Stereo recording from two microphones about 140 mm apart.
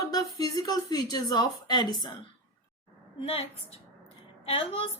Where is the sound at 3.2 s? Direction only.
45° left (ahead or behind).